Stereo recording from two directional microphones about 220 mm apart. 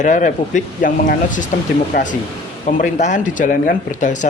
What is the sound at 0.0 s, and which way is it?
Speech, 35° left (ahead or behind).